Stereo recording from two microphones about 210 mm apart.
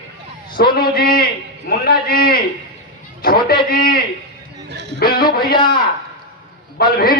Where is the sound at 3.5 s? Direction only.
45° left (ahead or behind).